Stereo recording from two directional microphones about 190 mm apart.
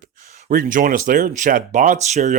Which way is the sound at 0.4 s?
45° right (ahead or behind).